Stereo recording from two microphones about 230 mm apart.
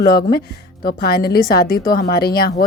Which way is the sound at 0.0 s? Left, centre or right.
Left.